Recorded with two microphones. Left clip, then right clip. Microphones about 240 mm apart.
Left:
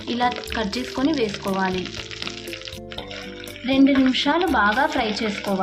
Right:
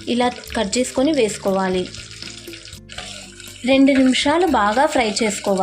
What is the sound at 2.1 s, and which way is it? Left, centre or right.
Frying, centre.